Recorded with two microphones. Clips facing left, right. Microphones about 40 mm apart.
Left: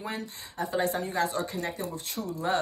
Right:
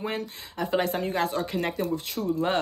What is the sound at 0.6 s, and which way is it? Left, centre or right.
Speech, right.